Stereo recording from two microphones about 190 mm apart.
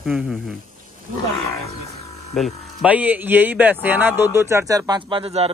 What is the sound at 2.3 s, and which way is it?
Speech, centre (ahead or behind).